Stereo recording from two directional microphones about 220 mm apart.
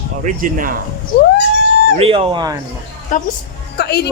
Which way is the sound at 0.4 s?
40° right (ahead or behind).